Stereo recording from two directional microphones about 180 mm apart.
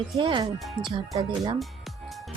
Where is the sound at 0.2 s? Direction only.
25° right (ahead or behind).